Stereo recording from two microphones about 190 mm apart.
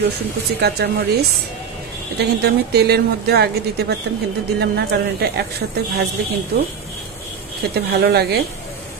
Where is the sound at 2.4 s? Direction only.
60° right (ahead or behind).